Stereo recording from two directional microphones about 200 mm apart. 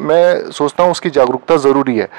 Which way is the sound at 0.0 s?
10° right (ahead or behind).